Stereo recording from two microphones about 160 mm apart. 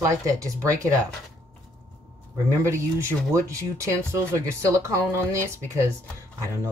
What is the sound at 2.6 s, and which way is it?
Speech, 15° right (ahead or behind).